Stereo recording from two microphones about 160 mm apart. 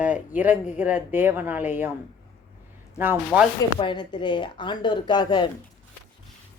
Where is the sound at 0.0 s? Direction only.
10° right (ahead or behind).